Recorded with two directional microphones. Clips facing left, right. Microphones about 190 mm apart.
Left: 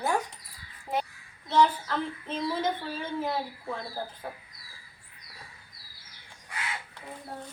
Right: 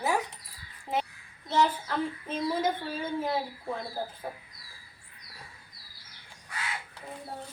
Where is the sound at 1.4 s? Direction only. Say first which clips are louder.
Left 3 dB; 10° right (ahead or behind).